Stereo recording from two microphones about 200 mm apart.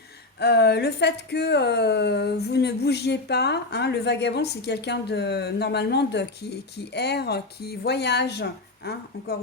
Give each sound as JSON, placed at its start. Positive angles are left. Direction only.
{"t": 0.3, "sound": "speech", "side_deg": 55}